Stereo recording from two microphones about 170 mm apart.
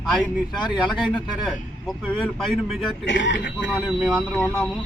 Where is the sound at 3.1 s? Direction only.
90° left.